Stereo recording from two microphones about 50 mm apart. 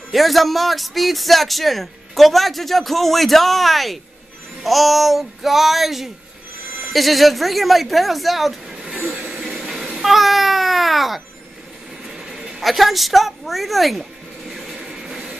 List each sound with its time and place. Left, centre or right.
0.1 s a man's voice: centre
8.8 s vehicle: right
9.6 s a sound: centre
10.0 s music: centre
12.1 s a sound: centre
12.6 s a man's voice: centre
14.9 s music: centre